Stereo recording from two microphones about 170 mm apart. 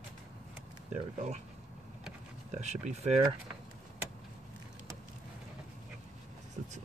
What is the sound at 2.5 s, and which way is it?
Speech, 45° right (ahead or behind).